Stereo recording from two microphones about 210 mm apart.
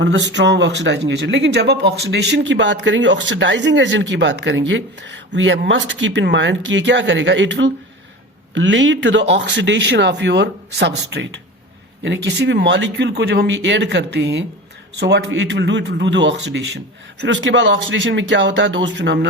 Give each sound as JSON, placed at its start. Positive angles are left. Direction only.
{"t": 0.0, "sound": "speech", "side_deg": -60}